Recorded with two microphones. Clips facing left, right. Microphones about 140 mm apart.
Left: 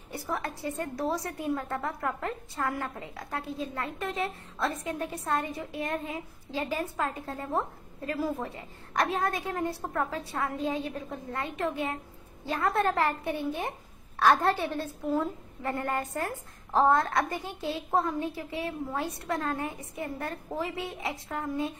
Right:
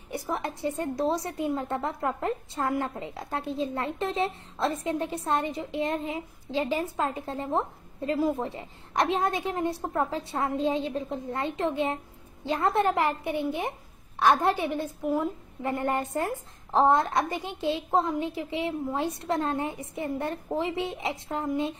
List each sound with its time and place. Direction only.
0.1 s a woman's voice: 20° right (ahead or behind)